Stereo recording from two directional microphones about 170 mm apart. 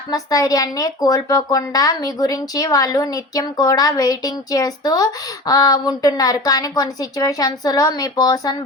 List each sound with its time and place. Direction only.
0.1 s speech: 20° left (ahead or behind)